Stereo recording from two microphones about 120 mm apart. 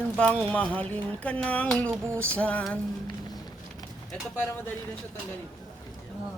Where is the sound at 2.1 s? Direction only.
20° right (ahead or behind).